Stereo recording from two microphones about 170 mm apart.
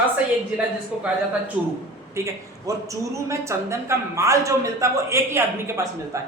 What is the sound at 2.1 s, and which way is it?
A woman's voice, 20° right (ahead or behind).